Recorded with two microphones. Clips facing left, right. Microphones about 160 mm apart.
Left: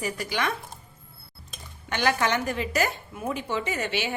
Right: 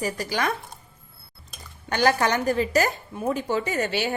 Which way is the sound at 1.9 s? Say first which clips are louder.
Right 3 dB; 40° right (ahead or behind).